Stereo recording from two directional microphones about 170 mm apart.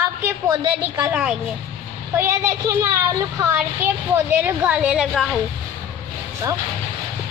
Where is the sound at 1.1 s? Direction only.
5° right (ahead or behind).